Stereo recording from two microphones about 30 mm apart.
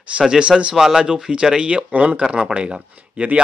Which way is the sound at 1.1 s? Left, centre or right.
Right.